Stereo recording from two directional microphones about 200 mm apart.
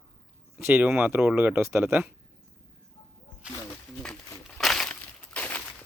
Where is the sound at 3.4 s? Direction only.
5° right (ahead or behind).